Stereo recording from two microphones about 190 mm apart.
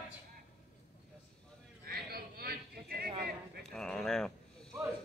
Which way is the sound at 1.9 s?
55° right (ahead or behind).